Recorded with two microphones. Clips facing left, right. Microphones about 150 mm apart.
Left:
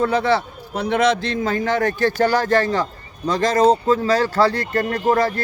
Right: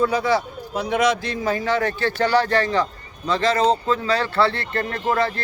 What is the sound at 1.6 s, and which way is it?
A man's voice, 50° left (ahead or behind).